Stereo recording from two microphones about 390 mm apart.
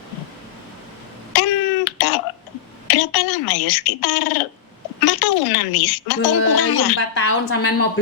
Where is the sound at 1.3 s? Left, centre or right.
Left.